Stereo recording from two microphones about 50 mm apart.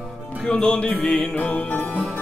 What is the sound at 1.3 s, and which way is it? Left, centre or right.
Music, left.